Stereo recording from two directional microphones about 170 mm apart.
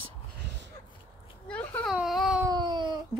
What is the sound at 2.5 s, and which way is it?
Baby cry, 25° right (ahead or behind).